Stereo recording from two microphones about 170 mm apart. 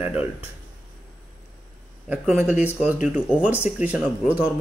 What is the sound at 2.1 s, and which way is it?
A man's voice, 5° right (ahead or behind).